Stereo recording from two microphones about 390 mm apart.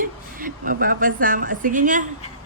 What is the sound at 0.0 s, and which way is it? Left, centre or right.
A woman's voice, right.